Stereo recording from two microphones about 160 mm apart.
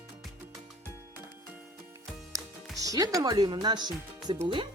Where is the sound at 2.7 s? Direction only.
20° right (ahead or behind).